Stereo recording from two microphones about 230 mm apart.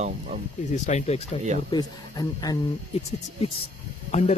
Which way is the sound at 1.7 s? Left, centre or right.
Centre.